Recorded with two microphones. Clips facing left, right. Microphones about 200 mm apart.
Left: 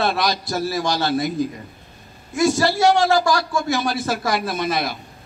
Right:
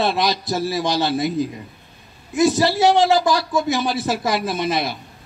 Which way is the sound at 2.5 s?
20° right (ahead or behind).